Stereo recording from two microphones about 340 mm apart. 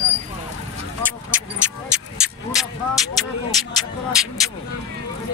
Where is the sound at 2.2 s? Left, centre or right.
Centre.